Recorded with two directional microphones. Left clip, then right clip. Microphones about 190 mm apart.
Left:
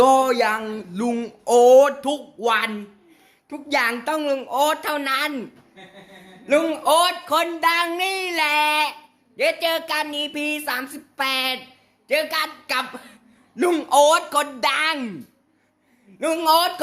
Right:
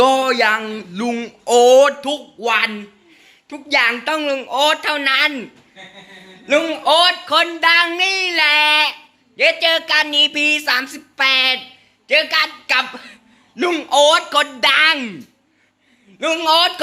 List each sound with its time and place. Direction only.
0.0 s a man's voice: centre (ahead or behind)
4.0 s speech: centre (ahead or behind)
13.6 s a man's voice: 15° left (ahead or behind)
14.0 s speech: 5° left (ahead or behind)
16.1 s a man's voice: 10° left (ahead or behind)